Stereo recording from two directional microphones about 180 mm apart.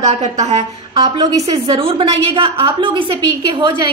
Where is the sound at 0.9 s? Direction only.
20° right (ahead or behind).